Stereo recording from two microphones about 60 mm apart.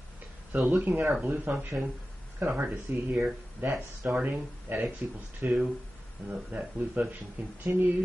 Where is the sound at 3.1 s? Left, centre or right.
Right.